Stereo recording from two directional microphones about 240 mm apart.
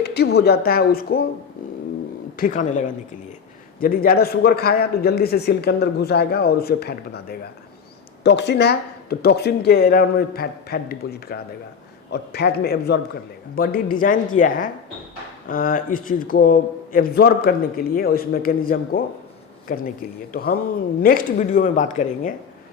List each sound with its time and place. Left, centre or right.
0.0 s a man's voice: left
2.3 s a man's voice: left